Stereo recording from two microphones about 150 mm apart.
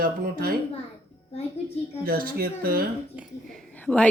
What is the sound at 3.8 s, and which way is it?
Speech, 5° left (ahead or behind).